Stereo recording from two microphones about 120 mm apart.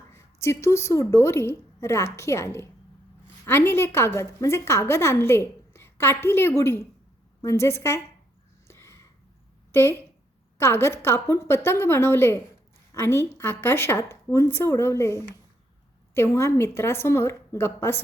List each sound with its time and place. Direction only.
0.1 s a woman's voice: 25° left (ahead or behind)
8.6 s a sound: 20° left (ahead or behind)
10.6 s a woman's voice: 20° left (ahead or behind)